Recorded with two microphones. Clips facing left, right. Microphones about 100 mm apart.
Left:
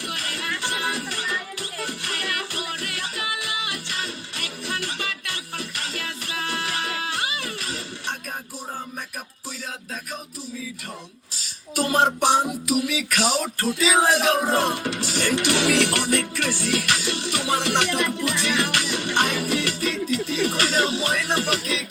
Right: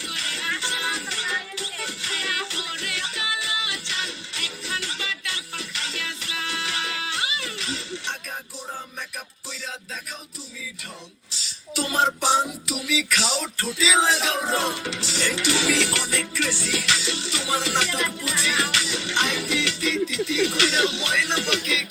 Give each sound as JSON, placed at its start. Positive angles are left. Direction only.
{"t": 0.0, "sound": "music", "side_deg": 50}
{"t": 11.3, "sound": "music", "side_deg": 50}